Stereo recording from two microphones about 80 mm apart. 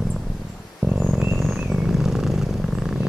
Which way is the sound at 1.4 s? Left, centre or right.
Centre.